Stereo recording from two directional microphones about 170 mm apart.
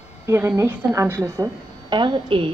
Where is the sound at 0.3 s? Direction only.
15° right (ahead or behind).